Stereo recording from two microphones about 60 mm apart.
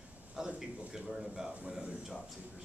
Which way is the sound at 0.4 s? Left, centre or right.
Centre.